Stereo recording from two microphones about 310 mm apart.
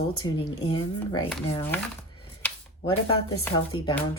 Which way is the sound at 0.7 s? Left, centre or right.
Centre.